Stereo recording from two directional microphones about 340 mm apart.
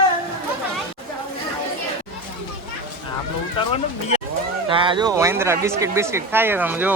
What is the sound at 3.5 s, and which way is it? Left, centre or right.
Speech, centre.